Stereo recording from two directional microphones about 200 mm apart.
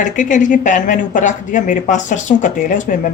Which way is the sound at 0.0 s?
40° left (ahead or behind).